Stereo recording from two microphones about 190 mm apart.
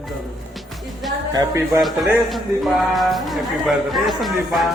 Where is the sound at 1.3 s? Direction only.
15° right (ahead or behind).